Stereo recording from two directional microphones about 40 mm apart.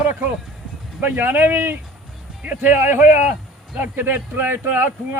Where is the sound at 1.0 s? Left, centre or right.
Right.